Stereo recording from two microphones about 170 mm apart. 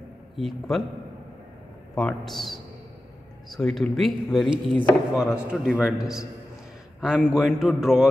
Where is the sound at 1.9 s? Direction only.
Centre (ahead or behind).